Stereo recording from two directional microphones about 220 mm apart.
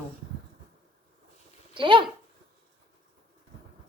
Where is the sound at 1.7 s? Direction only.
20° right (ahead or behind).